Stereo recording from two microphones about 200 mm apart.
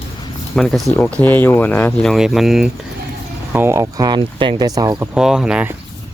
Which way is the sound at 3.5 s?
15° right (ahead or behind).